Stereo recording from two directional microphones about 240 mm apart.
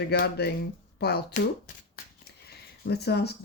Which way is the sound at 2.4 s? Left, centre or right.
Left.